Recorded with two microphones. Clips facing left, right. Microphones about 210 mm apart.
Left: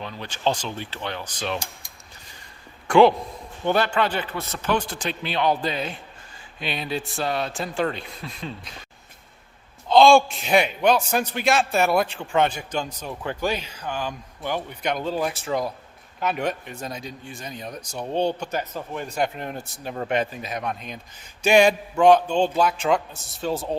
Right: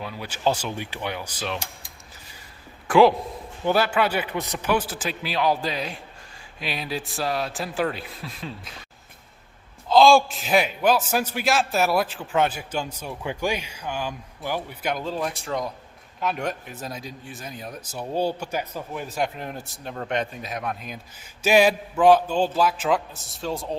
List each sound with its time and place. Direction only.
0.0 s speech: 10° right (ahead or behind)
2.8 s a man's voice: centre (ahead or behind)
9.9 s a man's voice: centre (ahead or behind)